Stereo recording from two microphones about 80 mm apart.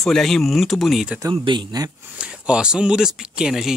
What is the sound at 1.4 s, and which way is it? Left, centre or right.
Speech, right.